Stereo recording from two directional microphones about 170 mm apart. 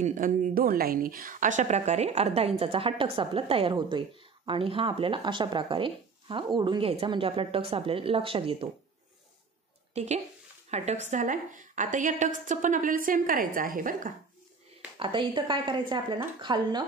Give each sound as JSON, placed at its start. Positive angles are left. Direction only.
{"t": 0.0, "sound": "speech", "side_deg": -50}
{"t": 9.9, "sound": "a woman's voice", "side_deg": -40}
{"t": 15.0, "sound": "a woman's voice", "side_deg": -30}